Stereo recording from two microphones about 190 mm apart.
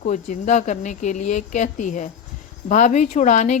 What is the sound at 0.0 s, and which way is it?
Speech, 40° left (ahead or behind).